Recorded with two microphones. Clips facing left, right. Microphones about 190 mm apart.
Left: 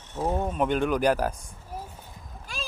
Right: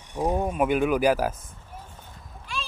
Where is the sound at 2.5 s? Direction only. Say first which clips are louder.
Right 3 dB; 45° left (ahead or behind).